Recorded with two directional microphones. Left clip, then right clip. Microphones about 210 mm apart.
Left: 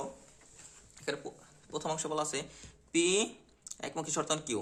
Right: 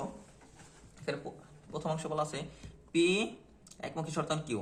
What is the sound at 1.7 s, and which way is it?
A man's voice, 50° left (ahead or behind).